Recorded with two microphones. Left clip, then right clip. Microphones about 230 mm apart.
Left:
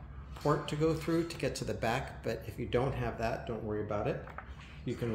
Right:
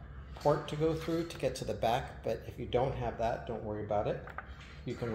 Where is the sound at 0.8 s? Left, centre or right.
Left.